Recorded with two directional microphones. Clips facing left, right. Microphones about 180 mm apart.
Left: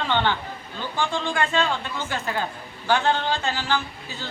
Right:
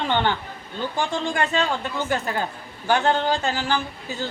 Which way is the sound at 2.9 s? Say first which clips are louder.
Right 2 dB; 45° right (ahead or behind).